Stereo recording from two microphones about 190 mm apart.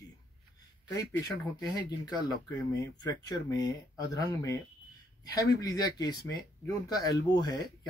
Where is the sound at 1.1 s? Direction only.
20° left (ahead or behind).